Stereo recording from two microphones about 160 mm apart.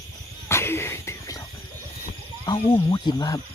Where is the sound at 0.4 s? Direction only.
15° left (ahead or behind).